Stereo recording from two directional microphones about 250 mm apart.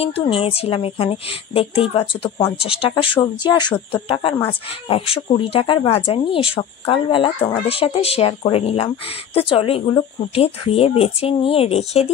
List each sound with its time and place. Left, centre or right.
0.3 s speech: left